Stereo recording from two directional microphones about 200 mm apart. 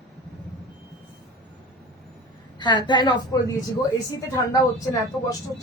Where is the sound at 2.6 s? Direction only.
20° left (ahead or behind).